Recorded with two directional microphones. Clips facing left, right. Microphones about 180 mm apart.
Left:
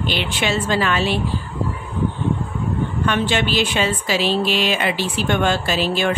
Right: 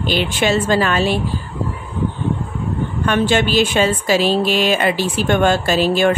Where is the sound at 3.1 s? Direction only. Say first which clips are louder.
Right 5 dB; 45° right (ahead or behind).